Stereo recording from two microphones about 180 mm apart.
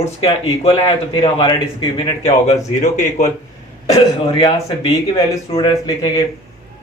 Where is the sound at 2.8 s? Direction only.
40° left (ahead or behind).